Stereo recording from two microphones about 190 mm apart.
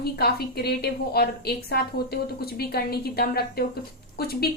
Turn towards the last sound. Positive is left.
turn(degrees=55)  # may be behind; listen again after turning